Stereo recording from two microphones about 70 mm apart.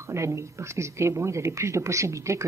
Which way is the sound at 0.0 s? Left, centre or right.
Right.